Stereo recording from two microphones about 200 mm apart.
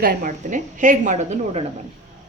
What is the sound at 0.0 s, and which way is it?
A woman's voice, 45° right (ahead or behind).